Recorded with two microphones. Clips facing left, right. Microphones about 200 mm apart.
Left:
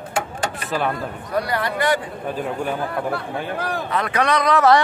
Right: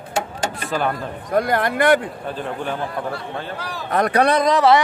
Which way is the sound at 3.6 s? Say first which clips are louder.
Left 5 dB; 55° left (ahead or behind).